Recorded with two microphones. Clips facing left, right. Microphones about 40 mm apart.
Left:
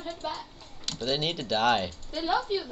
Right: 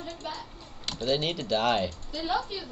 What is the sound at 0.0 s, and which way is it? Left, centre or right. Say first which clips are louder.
Speech: left 2 dB; left.